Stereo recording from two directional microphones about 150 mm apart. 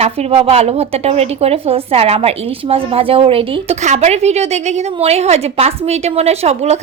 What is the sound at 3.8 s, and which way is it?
A woman's voice, 50° right (ahead or behind).